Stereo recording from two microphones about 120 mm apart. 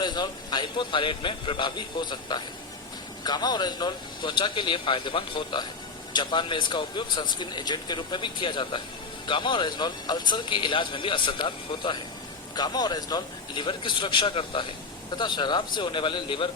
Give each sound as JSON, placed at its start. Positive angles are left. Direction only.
{"t": 0.0, "sound": "speech", "side_deg": 35}